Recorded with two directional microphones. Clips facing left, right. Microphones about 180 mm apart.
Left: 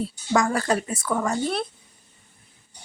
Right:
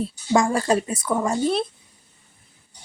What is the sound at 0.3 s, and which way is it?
A woman's voice, 25° right (ahead or behind).